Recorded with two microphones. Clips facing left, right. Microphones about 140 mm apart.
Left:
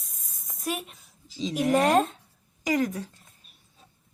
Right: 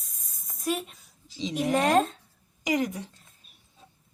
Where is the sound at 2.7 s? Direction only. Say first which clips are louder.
Left 1 dB; 15° right (ahead or behind).